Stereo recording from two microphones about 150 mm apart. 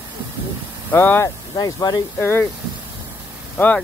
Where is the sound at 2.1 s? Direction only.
15° left (ahead or behind).